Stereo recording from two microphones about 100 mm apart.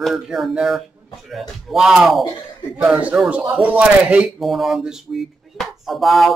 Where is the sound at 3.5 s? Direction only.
15° right (ahead or behind).